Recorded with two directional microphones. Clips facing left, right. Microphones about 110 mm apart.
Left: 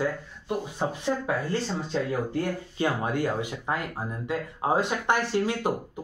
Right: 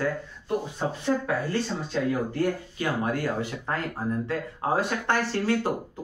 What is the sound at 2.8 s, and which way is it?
Speech, 20° left (ahead or behind).